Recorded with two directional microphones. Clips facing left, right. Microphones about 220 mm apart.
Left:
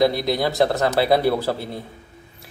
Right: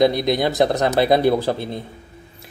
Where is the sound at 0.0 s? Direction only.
20° right (ahead or behind).